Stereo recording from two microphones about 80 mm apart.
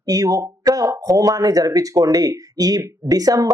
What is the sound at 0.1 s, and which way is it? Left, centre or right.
Speech, right.